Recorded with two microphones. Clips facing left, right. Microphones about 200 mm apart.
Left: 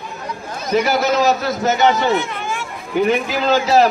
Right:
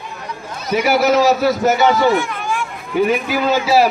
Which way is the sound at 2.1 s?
20° left (ahead or behind).